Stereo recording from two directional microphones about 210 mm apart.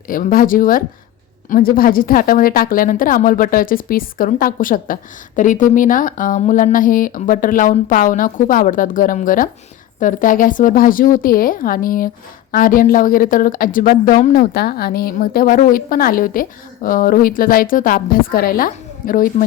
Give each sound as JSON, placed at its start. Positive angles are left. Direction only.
{"t": 0.1, "sound": "a woman's voice", "side_deg": 40}